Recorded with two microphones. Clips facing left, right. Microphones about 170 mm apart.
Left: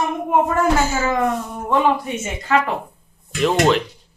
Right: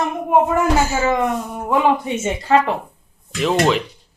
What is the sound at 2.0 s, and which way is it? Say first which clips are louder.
Speech: right 4 dB; 25° right (ahead or behind).